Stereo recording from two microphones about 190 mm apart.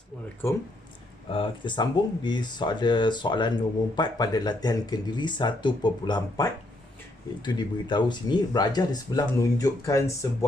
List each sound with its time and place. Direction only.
0.4 s speech: 10° left (ahead or behind)
1.3 s speech: 25° left (ahead or behind)